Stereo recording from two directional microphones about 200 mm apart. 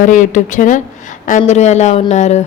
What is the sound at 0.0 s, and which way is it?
A woman's voice, 40° left (ahead or behind).